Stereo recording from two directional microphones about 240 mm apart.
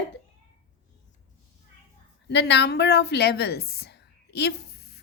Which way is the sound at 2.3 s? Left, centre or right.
Left.